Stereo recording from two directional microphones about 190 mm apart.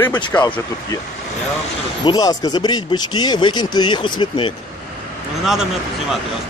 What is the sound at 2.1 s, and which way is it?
Speech, 20° left (ahead or behind).